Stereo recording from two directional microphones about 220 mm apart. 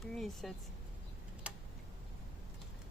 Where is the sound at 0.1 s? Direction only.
Centre (ahead or behind).